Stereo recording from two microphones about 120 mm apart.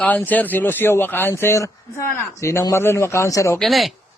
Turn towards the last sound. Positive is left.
turn(degrees=0)  # may be behind; listen again after turning